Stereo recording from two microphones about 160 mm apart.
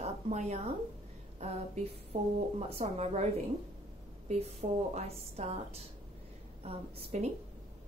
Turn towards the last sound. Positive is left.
turn(degrees=-40)  # may be behind; listen again after turning